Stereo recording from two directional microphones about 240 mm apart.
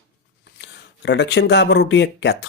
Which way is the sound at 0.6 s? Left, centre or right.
Left.